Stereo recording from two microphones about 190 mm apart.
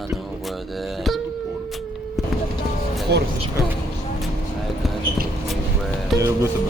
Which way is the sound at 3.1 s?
60° right (ahead or behind).